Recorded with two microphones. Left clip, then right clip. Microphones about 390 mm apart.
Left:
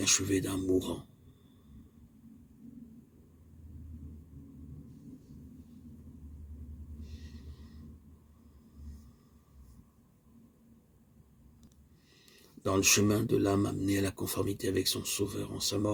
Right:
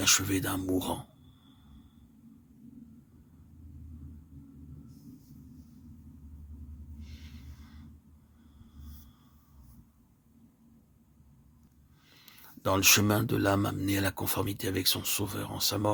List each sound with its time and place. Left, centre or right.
0.0 s speech: right
12.2 s speech: right